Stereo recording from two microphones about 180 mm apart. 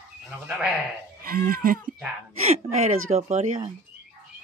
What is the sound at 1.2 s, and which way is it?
Speech, 55° right (ahead or behind).